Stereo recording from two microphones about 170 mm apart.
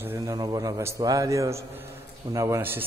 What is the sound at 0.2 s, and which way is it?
A man's voice, 20° right (ahead or behind).